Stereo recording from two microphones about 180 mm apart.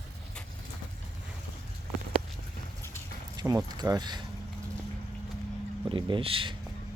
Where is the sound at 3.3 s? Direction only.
20° right (ahead or behind).